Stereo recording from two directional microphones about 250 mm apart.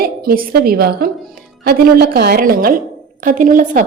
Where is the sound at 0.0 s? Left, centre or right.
Right.